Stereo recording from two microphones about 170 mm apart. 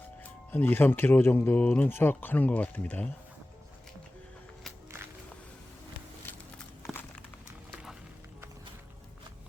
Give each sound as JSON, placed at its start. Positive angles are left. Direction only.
{"t": 0.2, "sound": "speech", "side_deg": 10}
{"t": 4.9, "sound": "walk", "side_deg": -15}
{"t": 6.3, "sound": "a sound", "side_deg": 10}
{"t": 7.7, "sound": "music", "side_deg": 0}